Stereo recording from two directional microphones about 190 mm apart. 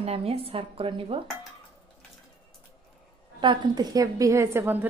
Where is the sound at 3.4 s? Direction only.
25° right (ahead or behind).